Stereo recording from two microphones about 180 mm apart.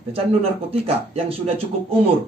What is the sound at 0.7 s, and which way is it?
Speech, 35° right (ahead or behind).